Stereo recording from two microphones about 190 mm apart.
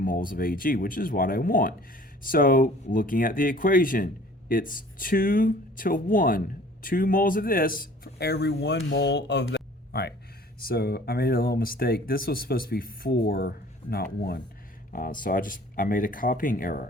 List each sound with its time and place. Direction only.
0.0 s speech: 45° left (ahead or behind)